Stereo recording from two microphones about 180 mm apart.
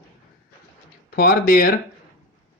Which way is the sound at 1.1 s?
60° left (ahead or behind).